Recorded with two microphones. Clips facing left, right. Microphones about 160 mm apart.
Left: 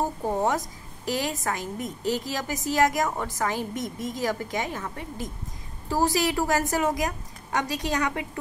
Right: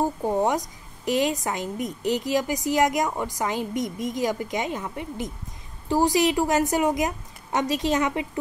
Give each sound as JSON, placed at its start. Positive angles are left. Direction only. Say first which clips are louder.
{"t": 0.5, "sound": "a woman's voice", "louder": "right 1 dB", "side_deg": -20}